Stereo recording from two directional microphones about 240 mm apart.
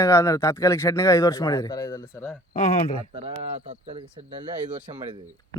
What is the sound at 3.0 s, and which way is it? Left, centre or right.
Speech, right.